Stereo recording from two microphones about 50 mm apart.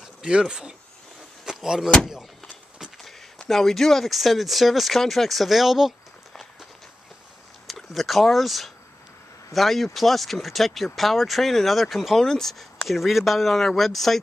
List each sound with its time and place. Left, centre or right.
0.2 s speech: centre
1.4 s door: centre
3.1 s speech: centre
7.9 s speech: centre
12.2 s speech: centre